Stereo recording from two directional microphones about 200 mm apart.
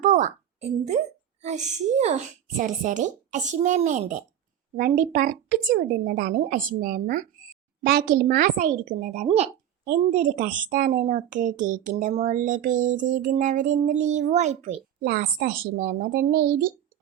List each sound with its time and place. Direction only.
0.0 s a woman's voice: 40° right (ahead or behind)
15.0 s a woman's voice: 50° right (ahead or behind)